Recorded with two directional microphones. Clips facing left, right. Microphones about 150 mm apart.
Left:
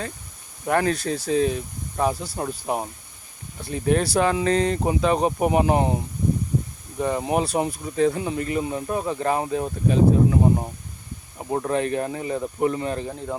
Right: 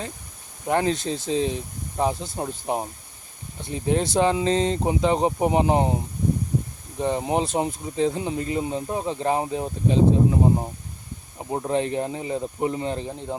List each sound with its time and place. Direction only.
0.7 s speech: 20° right (ahead or behind)
7.0 s speech: 25° right (ahead or behind)
11.5 s speech: 20° right (ahead or behind)